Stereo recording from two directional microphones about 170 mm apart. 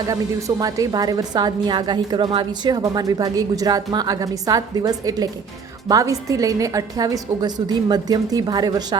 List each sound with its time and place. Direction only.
0.1 s a woman's voice: 20° right (ahead or behind)